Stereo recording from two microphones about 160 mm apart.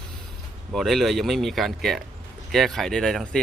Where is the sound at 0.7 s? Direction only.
Centre (ahead or behind).